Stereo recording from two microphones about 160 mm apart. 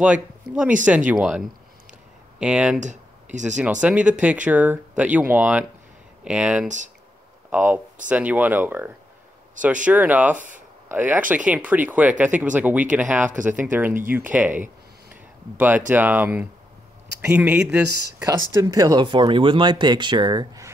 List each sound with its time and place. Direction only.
0.0 s speech: 10° right (ahead or behind)
2.8 s a sound: 50° right (ahead or behind)
3.8 s speech: 5° right (ahead or behind)
14.3 s a sound: 10° right (ahead or behind)
15.9 s speech: 10° right (ahead or behind)
18.2 s speech: 20° right (ahead or behind)